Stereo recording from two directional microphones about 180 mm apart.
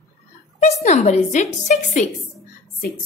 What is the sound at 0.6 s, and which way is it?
A woman's voice, 40° left (ahead or behind).